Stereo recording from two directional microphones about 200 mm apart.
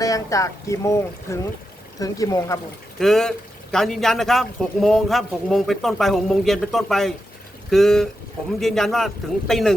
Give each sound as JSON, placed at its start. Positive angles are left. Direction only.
{"t": 0.0, "sound": "speech", "side_deg": 15}
{"t": 3.0, "sound": "a man's voice", "side_deg": 0}